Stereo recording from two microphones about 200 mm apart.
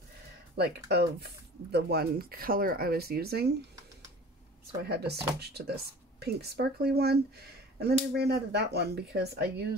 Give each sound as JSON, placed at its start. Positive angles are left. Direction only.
{"t": 0.6, "sound": "speech", "side_deg": -55}
{"t": 4.8, "sound": "speech", "side_deg": -55}